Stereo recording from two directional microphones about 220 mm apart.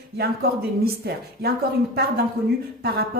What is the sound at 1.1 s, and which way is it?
Speech, 45° right (ahead or behind).